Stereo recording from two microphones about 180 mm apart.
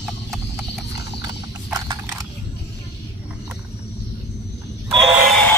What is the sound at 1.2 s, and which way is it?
Horse, 20° right (ahead or behind).